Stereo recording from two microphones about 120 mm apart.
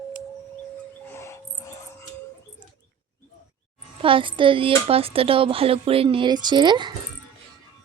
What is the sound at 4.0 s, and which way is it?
Speech, 45° right (ahead or behind).